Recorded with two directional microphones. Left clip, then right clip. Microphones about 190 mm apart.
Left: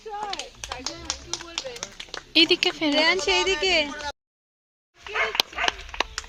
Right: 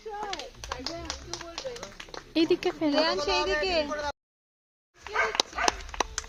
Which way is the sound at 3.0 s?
35° left (ahead or behind).